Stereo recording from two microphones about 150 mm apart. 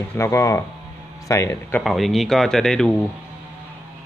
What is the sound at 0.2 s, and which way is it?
Speech, 20° left (ahead or behind).